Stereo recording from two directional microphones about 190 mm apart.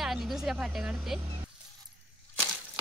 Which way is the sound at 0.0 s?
Centre (ahead or behind).